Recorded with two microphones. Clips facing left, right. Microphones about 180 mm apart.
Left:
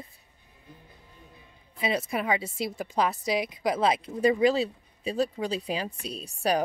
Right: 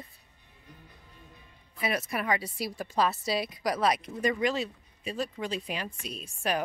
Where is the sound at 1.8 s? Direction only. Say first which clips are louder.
Left 3 dB; 25° left (ahead or behind).